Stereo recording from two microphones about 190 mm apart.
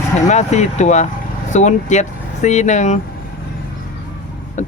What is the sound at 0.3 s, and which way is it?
Speech, 40° left (ahead or behind).